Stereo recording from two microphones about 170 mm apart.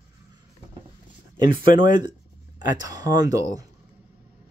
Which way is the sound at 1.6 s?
30° right (ahead or behind).